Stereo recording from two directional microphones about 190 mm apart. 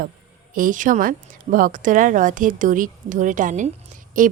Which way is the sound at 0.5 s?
45° right (ahead or behind).